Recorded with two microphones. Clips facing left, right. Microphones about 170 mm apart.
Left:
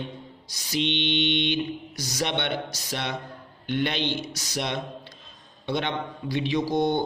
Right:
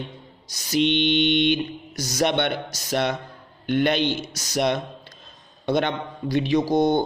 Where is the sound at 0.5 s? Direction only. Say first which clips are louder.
Right 6 dB; 45° right (ahead or behind).